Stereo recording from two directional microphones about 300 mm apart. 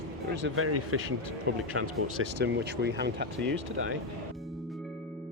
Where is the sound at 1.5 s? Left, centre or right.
Right.